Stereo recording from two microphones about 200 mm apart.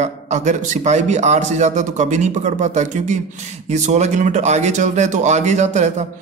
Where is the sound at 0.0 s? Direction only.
35° right (ahead or behind).